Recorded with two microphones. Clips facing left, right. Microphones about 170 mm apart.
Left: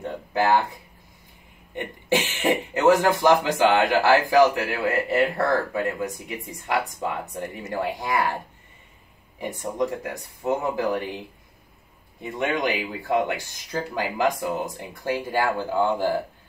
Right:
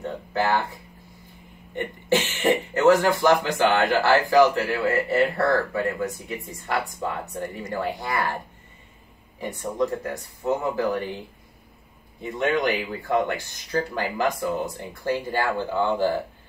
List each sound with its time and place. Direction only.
0.3 s speech: 15° left (ahead or behind)
1.8 s speech: 15° left (ahead or behind)
9.4 s speech: 15° left (ahead or behind)